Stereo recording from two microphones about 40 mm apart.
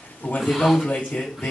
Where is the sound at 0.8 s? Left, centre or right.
Left.